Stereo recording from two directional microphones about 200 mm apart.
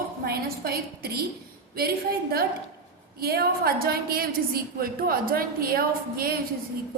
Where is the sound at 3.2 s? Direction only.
50° right (ahead or behind).